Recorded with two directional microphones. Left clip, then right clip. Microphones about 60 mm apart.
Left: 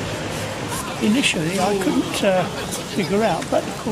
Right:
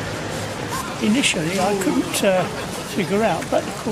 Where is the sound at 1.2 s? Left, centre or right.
Centre.